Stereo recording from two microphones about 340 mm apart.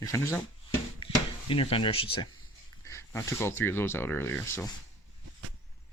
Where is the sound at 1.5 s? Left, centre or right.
Centre.